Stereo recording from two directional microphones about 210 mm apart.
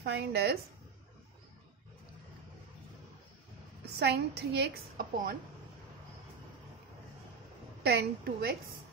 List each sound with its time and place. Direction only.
0.0 s a woman's voice: 50° right (ahead or behind)
4.0 s a woman's voice: 50° right (ahead or behind)
7.8 s a woman's voice: 50° right (ahead or behind)